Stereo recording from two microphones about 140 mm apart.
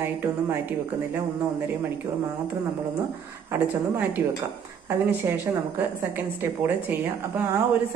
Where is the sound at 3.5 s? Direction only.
15° right (ahead or behind).